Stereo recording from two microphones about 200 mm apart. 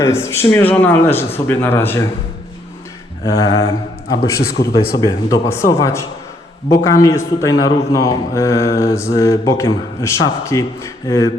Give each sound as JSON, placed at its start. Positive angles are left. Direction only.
{"t": 0.0, "sound": "a man's voice", "side_deg": 15}
{"t": 3.2, "sound": "a man's voice", "side_deg": 15}
{"t": 4.6, "sound": "speech", "side_deg": 50}
{"t": 4.9, "sound": "a man's voice", "side_deg": 15}